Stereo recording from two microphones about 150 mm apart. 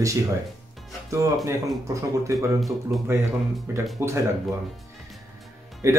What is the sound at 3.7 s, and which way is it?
Speech, 15° right (ahead or behind).